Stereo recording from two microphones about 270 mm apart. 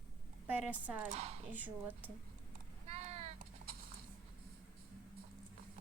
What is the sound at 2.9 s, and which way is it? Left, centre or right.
Clip-clop, right.